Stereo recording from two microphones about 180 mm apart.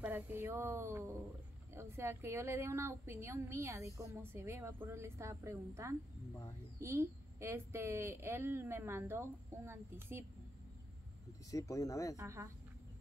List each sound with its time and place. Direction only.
0.0 s a woman's voice: 10° right (ahead or behind)
11.5 s speech: 15° left (ahead or behind)
12.2 s a woman's voice: 15° right (ahead or behind)